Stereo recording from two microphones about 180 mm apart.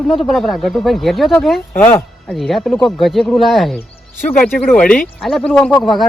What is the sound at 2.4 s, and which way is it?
Speech, centre (ahead or behind).